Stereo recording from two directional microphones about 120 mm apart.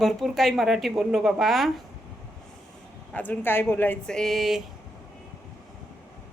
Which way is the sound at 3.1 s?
15° left (ahead or behind).